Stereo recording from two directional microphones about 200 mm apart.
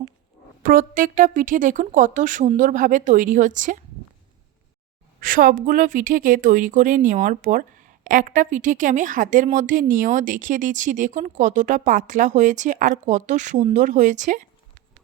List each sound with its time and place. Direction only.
0.6 s a woman's voice: 45° right (ahead or behind)
5.2 s a woman's voice: 45° right (ahead or behind)